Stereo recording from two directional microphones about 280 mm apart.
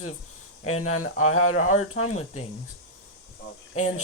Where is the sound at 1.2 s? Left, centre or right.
Left.